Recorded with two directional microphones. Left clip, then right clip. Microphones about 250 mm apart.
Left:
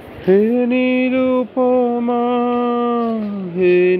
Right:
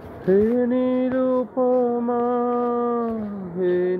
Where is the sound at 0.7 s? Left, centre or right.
Left.